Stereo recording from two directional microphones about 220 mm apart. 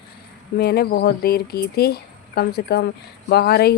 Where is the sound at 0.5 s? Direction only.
45° left (ahead or behind).